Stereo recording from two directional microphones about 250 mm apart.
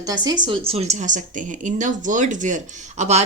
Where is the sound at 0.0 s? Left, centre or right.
Centre.